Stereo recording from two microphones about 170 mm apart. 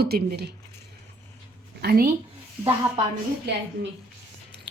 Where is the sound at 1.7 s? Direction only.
65° right (ahead or behind).